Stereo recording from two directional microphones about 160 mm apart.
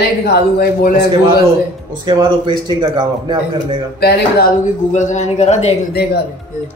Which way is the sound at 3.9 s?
85° left.